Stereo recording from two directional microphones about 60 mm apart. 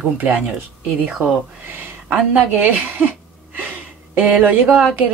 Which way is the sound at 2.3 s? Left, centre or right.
Right.